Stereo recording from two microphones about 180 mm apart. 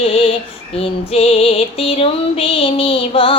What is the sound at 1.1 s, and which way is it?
A woman's voice, 35° left (ahead or behind).